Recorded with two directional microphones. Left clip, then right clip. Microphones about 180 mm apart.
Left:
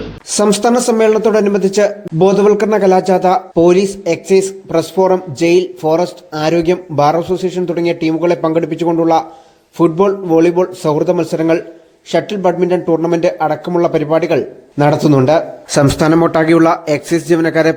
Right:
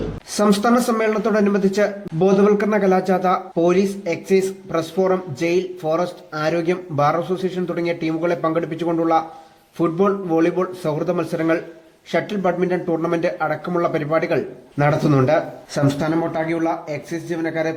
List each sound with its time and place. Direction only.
0.3 s speech: 30° left (ahead or behind)
15.7 s speech: 45° left (ahead or behind)